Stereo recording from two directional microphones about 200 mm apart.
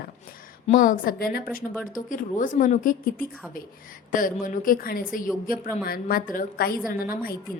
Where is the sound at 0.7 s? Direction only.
40° left (ahead or behind).